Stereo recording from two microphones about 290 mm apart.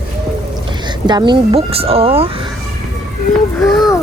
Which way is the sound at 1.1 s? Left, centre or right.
Centre.